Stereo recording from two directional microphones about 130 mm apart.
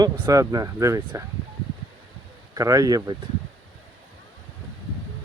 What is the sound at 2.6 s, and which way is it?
Speech, 25° right (ahead or behind).